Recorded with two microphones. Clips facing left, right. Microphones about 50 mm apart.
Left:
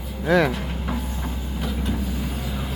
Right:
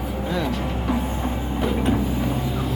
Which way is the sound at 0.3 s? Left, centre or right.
Left.